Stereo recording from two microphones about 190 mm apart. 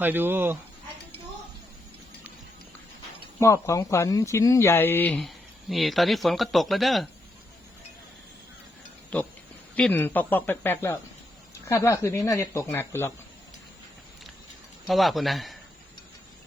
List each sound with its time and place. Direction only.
0.0 s speech: 10° right (ahead or behind)
3.4 s speech: 15° left (ahead or behind); by 7.1 s centre (ahead or behind)
9.1 s speech: 5° left (ahead or behind)
14.8 s speech: centre (ahead or behind)